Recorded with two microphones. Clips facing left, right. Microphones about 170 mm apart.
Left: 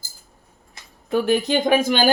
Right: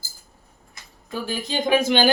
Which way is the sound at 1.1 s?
65° left (ahead or behind).